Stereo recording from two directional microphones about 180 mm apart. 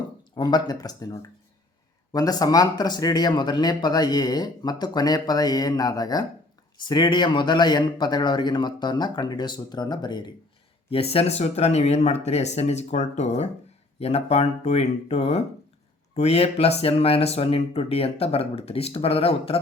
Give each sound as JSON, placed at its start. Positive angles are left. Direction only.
{"t": 0.3, "sound": "speech", "side_deg": 20}